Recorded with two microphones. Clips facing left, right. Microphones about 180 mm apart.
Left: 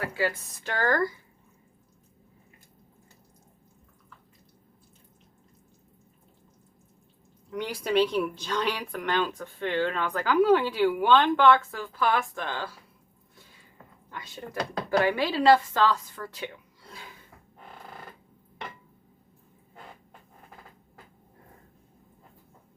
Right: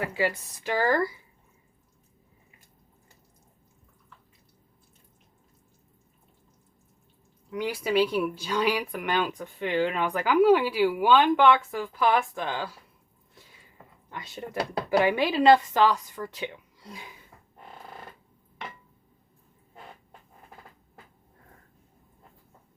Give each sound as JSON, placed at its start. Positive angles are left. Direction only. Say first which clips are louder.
{"t": 0.0, "sound": "speech", "louder": "right 1 dB", "side_deg": -15}
{"t": 7.5, "sound": "speech", "louder": "even", "side_deg": -5}
{"t": 14.1, "sound": "speech", "louder": "right 2 dB", "side_deg": -15}
{"t": 16.9, "sound": "a sound", "louder": "right 2 dB", "side_deg": -15}